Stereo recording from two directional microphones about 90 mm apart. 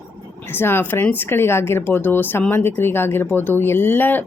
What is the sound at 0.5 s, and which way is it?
Speech, 25° left (ahead or behind).